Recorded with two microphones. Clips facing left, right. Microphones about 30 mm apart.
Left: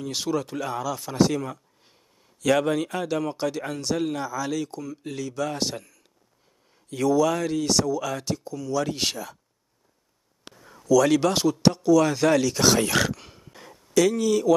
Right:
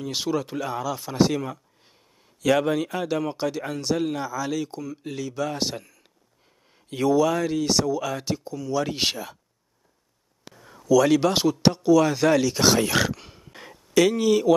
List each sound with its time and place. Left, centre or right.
0.0 s speech: centre
6.9 s speech: right
7.2 s speech: centre
10.5 s a sound: centre
11.3 s speech: centre
13.5 s a sound: right